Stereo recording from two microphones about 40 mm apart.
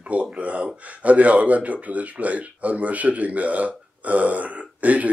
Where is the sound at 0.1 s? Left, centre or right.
Right.